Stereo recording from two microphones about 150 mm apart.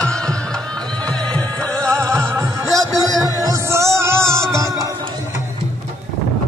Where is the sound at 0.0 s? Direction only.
5° left (ahead or behind).